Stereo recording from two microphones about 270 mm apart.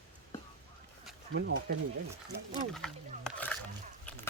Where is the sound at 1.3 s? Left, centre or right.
Right.